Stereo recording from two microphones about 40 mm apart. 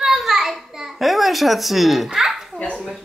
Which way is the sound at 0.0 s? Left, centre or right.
Centre.